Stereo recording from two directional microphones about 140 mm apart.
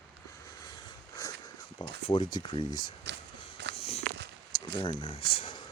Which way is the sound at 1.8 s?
40° left (ahead or behind).